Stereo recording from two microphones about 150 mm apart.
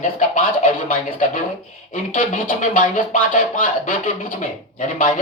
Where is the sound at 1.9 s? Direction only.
60° left (ahead or behind).